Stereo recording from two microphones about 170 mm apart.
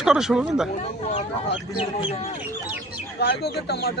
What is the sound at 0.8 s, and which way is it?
Speech, 40° left (ahead or behind).